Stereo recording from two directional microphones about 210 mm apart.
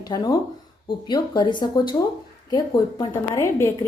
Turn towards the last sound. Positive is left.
turn(degrees=15)  # may be behind; listen again after turning